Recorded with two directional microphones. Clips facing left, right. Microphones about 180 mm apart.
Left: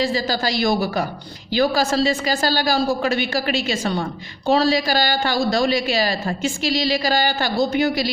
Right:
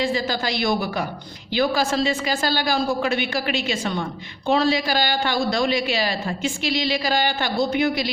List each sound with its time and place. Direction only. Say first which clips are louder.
0.0 s a woman's voice: left 2 dB; 35° left (ahead or behind)